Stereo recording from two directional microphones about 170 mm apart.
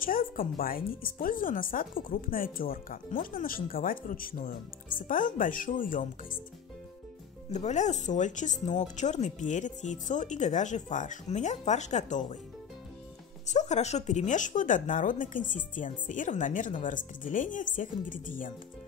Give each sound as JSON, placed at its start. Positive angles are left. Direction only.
{"t": 0.0, "sound": "speech", "side_deg": 55}
{"t": 7.5, "sound": "speech", "side_deg": 45}
{"t": 13.5, "sound": "speech", "side_deg": 45}